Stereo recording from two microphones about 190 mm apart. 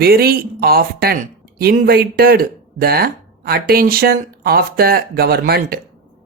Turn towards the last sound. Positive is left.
turn(degrees=-55)  # may be behind; listen again after turning